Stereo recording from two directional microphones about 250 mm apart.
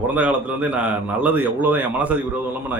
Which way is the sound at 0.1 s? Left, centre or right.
Centre.